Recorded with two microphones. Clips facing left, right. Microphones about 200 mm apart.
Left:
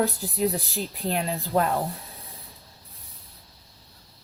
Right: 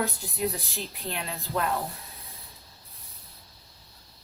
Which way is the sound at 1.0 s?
35° left (ahead or behind).